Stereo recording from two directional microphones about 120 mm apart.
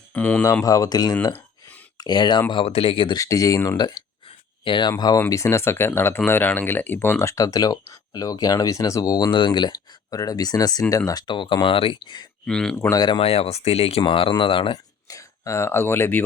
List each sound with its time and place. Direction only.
0.1 s speech: 10° left (ahead or behind)
0.6 s speech: 30° left (ahead or behind)
2.5 s speech: 50° left (ahead or behind)
3.2 s speech: 30° left (ahead or behind)
4.3 s a sound: 40° left (ahead or behind)
5.3 s speech: 25° left (ahead or behind)
12.5 s speech: 5° left (ahead or behind)
12.7 s speech: 20° left (ahead or behind)
13.0 s speech: 40° left (ahead or behind)
13.2 s speech: 55° left (ahead or behind)
14.0 s speech: 45° left (ahead or behind)
15.0 s speech: 25° left (ahead or behind)